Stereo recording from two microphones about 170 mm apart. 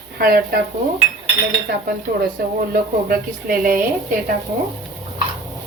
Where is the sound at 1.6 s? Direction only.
65° right (ahead or behind).